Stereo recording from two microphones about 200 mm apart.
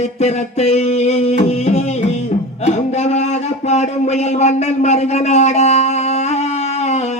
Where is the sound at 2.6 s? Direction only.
35° left (ahead or behind).